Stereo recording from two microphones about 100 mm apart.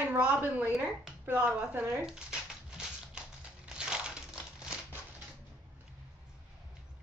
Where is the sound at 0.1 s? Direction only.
20° right (ahead or behind).